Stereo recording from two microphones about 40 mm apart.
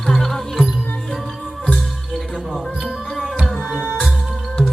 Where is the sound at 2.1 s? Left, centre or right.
Centre.